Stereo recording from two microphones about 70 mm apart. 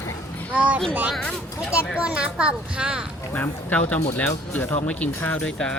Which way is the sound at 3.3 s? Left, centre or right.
Left.